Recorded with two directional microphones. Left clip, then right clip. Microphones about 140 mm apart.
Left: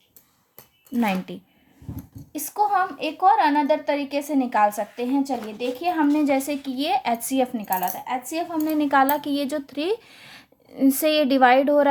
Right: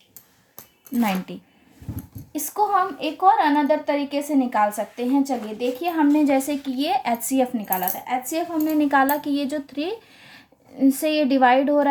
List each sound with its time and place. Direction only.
1.3 s a woman's voice: 35° left (ahead or behind)